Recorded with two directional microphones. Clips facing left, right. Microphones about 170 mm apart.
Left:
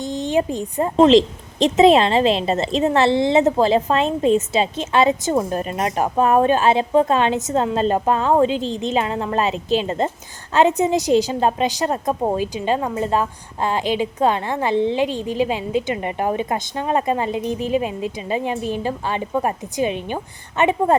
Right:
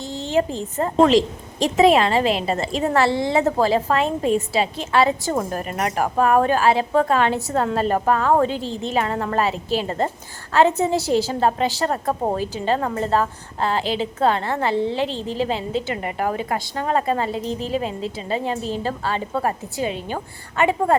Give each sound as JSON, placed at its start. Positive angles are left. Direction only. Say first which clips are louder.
{"t": 0.0, "sound": "a woman's voice", "louder": "left 1 dB", "side_deg": 15}